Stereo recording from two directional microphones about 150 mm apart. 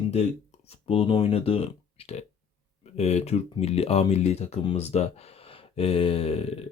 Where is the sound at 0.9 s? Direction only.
40° left (ahead or behind).